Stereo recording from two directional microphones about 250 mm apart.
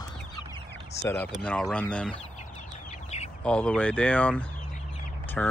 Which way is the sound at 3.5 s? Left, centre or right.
Centre.